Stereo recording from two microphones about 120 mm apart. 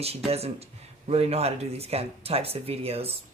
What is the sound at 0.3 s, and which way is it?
A man's voice, 60° right (ahead or behind).